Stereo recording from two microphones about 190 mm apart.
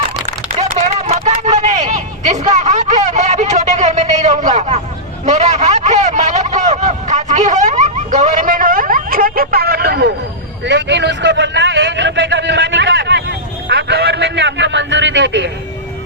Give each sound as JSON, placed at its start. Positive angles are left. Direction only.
{"t": 0.8, "sound": "a man's voice", "side_deg": -35}
{"t": 10.7, "sound": "a man's voice", "side_deg": -70}